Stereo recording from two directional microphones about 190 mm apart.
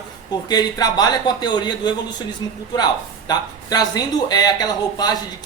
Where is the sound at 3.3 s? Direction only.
20° left (ahead or behind).